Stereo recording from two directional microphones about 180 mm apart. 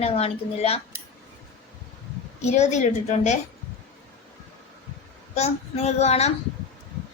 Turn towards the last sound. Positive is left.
turn(degrees=35)  # may be behind; listen again after turning